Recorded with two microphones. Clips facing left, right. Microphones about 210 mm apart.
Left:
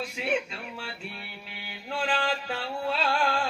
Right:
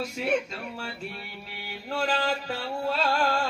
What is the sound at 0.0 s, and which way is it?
Mantra, 40° right (ahead or behind).